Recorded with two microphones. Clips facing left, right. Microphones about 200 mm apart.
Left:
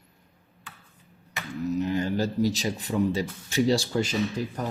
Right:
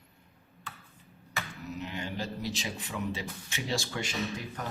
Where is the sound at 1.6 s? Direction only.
40° left (ahead or behind).